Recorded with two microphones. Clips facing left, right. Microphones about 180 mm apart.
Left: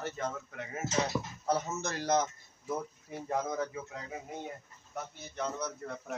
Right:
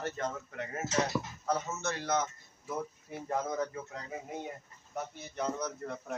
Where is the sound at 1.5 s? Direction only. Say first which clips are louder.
Left 1 dB; 35° left (ahead or behind).